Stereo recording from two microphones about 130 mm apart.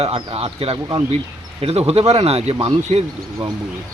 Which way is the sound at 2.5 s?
40° right (ahead or behind).